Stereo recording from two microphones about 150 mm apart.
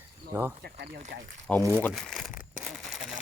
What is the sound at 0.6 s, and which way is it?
Speech, 90° right.